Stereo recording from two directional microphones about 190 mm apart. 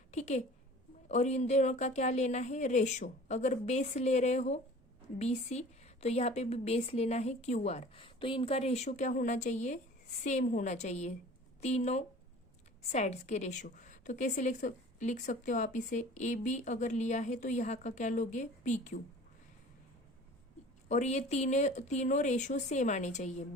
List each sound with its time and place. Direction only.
0.1 s a woman's voice: 35° left (ahead or behind)
20.8 s a woman's voice: 40° left (ahead or behind)